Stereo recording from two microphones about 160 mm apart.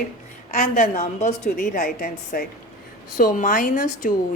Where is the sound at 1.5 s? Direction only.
55° left (ahead or behind).